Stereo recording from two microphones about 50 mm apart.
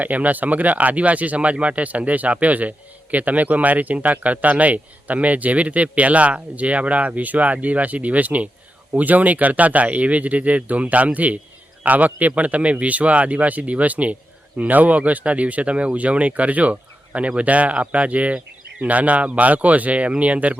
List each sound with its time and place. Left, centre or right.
0.0 s speech: right